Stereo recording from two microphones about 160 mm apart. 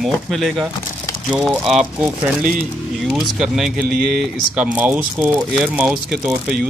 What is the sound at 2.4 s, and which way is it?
Speech, 65° right (ahead or behind).